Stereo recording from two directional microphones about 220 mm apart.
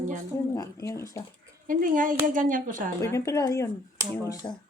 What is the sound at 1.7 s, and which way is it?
Speech, 40° right (ahead or behind).